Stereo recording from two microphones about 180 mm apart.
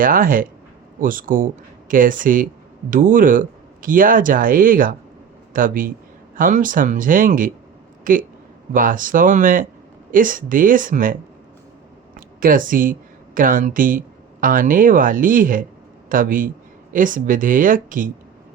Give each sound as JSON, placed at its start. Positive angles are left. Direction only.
{"t": 0.0, "sound": "a man's voice", "side_deg": -50}